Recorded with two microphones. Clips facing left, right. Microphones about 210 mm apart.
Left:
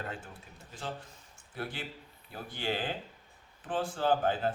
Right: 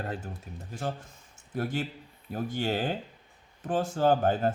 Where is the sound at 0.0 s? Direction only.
40° right (ahead or behind).